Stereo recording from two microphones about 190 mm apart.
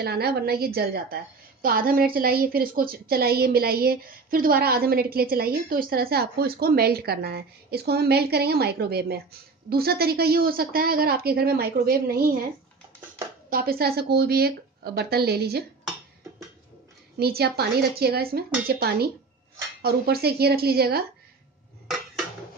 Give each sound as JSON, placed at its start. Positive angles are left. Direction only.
{"t": 0.0, "sound": "a woman's voice", "side_deg": -55}
{"t": 13.5, "sound": "a woman's voice", "side_deg": -50}
{"t": 17.2, "sound": "a woman's voice", "side_deg": -55}
{"t": 21.8, "sound": "dishes", "side_deg": 0}